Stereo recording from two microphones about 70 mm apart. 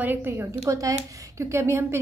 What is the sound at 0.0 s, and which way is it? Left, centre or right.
Speech, right.